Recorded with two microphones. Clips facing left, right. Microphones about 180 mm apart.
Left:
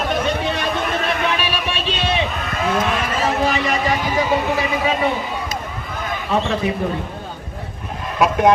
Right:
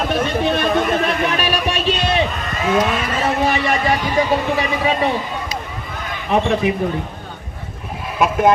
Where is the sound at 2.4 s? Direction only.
Centre (ahead or behind).